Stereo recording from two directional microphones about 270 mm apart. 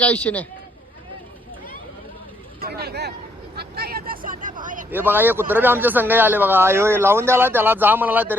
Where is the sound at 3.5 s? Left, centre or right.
Right.